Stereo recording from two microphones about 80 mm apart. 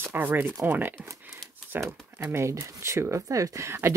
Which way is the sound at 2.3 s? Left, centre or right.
Right.